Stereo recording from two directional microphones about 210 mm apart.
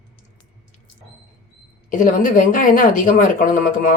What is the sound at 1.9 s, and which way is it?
A woman's voice, 40° left (ahead or behind).